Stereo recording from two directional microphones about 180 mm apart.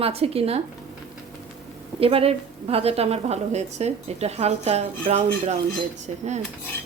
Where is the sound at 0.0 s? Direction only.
35° right (ahead or behind).